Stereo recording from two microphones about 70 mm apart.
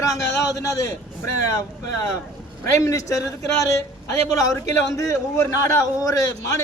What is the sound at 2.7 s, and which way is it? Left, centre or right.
Speech, left.